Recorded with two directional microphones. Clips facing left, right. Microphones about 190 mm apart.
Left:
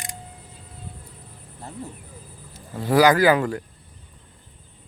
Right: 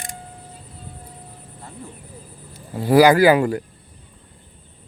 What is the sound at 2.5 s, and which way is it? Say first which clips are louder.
Speech: right 5 dB; 10° right (ahead or behind).